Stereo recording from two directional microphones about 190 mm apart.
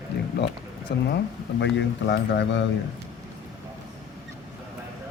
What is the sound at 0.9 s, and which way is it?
A man's voice, 60° left (ahead or behind).